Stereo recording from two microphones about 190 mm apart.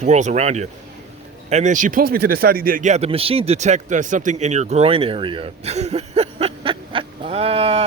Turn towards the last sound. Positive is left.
turn(degrees=-30)  # may be behind; listen again after turning